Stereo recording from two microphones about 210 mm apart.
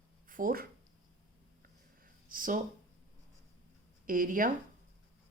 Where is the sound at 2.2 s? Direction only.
40° right (ahead or behind).